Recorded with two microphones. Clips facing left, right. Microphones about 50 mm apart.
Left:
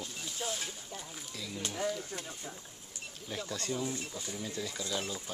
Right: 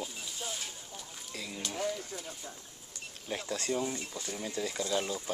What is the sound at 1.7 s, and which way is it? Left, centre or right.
Speech, centre.